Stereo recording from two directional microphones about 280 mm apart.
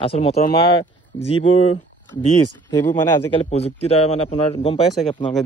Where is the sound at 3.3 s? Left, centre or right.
Left.